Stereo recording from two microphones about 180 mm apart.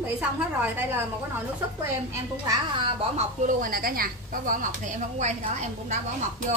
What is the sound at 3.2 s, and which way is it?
Speech, 45° right (ahead or behind).